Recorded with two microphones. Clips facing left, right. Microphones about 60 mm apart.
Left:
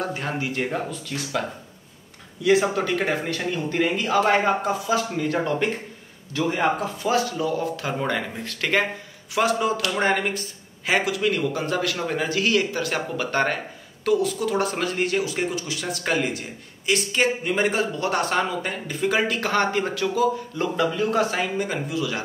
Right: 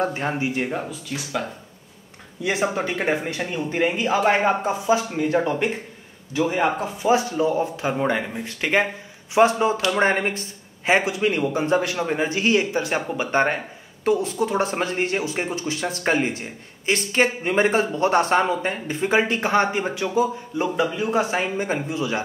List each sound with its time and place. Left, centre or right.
0.0 s speech: right
0.7 s speech: centre
2.4 s speech: right
9.3 s speech: right